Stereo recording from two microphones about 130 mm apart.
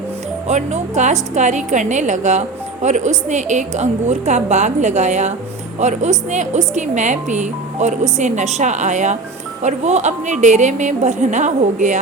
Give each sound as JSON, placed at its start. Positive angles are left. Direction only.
{"t": 0.4, "sound": "a woman's voice", "side_deg": -65}